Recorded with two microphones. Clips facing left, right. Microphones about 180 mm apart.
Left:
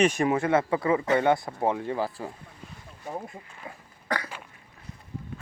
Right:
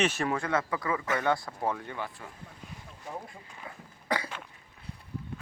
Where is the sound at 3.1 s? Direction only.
25° left (ahead or behind).